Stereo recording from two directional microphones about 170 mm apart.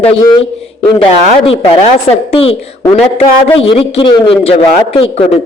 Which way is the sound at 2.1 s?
35° left (ahead or behind).